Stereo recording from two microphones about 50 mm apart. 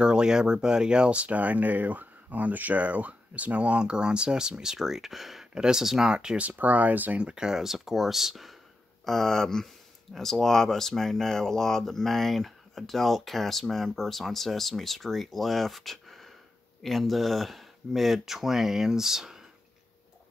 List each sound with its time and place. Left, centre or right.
0.0 s speech: centre
5.5 s speech: centre
6.1 s speech: right
7.2 s speech: centre
9.0 s speech: centre